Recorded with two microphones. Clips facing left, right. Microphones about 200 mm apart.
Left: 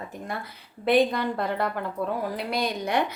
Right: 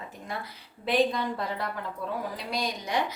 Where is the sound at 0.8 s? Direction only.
60° left (ahead or behind).